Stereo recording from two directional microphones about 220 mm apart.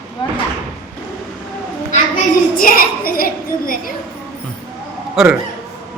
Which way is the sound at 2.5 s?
40° left (ahead or behind).